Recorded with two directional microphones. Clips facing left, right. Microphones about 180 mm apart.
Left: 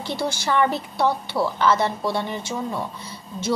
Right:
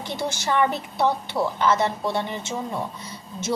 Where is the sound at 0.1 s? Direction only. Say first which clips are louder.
Left 2 dB; 20° right (ahead or behind).